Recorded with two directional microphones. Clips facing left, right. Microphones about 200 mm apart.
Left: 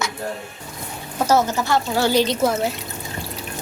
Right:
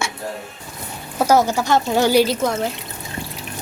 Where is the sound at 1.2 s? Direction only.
10° right (ahead or behind).